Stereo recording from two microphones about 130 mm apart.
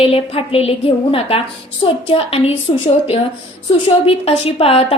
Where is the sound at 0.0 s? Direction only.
45° left (ahead or behind).